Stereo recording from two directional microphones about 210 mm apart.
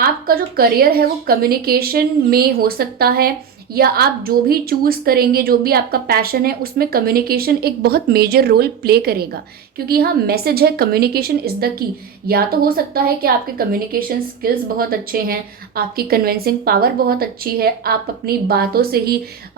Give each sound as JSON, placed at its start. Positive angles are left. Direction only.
{"t": 0.0, "sound": "a woman's voice", "side_deg": -45}